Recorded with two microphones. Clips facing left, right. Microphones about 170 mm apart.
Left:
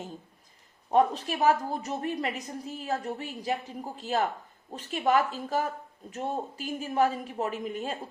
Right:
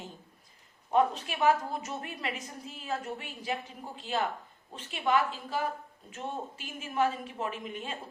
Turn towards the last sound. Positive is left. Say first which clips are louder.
# left 5 dB
turn(degrees=40)  # may be behind; listen again after turning